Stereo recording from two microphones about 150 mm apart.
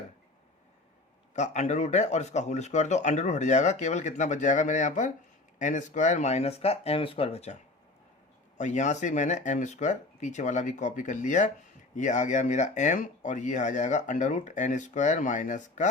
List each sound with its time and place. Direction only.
1.3 s speech: 50° left (ahead or behind)
8.5 s speech: 55° left (ahead or behind)